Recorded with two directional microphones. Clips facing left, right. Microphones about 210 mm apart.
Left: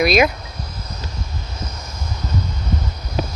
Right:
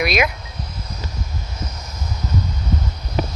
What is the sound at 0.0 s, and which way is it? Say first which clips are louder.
Speech: left 5 dB; 35° left (ahead or behind).